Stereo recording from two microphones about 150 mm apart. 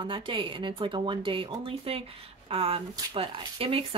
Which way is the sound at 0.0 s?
35° right (ahead or behind).